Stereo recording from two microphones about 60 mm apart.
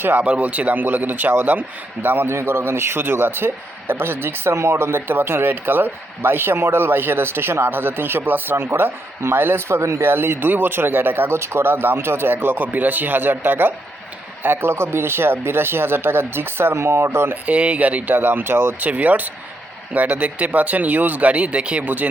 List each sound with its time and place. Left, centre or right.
0.2 s a man's voice: right
10.0 s a man's voice: right
17.4 s speech: right